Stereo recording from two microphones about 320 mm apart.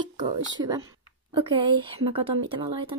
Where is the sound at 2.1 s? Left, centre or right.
Centre.